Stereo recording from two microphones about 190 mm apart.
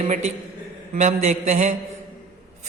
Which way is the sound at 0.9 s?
40° right (ahead or behind).